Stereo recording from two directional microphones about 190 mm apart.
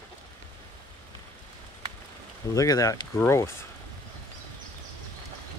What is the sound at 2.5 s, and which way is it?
Speech, 20° left (ahead or behind).